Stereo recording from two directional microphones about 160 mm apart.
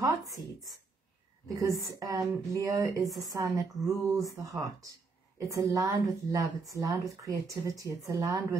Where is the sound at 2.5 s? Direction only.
20° right (ahead or behind).